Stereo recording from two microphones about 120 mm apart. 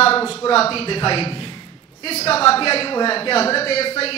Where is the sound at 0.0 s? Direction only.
50° left (ahead or behind).